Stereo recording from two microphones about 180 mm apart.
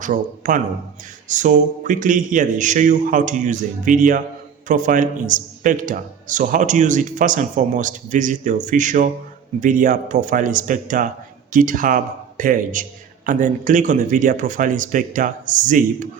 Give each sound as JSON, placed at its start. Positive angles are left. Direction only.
{"t": 0.0, "sound": "a man's voice", "side_deg": -45}